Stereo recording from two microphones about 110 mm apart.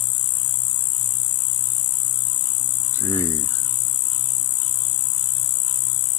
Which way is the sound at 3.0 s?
25° left (ahead or behind).